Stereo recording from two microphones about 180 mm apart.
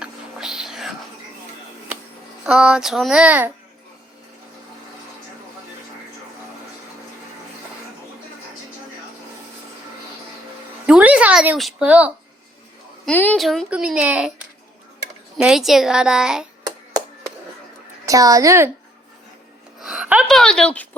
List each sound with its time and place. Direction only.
0.0 s whispering: 5° right (ahead or behind)
2.4 s a child's voice: 5° right (ahead or behind)
10.8 s a sound: 5° right (ahead or behind)
13.1 s a child's voice: 10° left (ahead or behind); by 14.3 s 10° right (ahead or behind)
15.4 s a child's voice: centre (ahead or behind)
18.0 s a woman's voice: 20° right (ahead or behind)
19.8 s a woman's voice: 5° right (ahead or behind)